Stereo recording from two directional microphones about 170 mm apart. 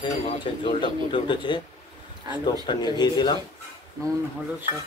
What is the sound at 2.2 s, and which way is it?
Speech, 25° right (ahead or behind).